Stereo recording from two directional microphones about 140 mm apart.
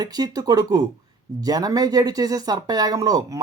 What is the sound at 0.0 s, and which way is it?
A man's voice, 30° right (ahead or behind).